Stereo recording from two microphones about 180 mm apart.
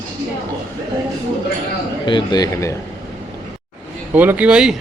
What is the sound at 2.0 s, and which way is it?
Speech, 25° left (ahead or behind).